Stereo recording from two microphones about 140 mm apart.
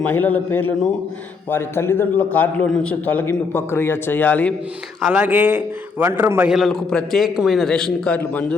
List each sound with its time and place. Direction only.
0.0 s a man's voice: 10° left (ahead or behind)
3.2 s a man's voice: 15° left (ahead or behind)
4.9 s a man's voice: 5° right (ahead or behind)
6.5 s a man's voice: centre (ahead or behind)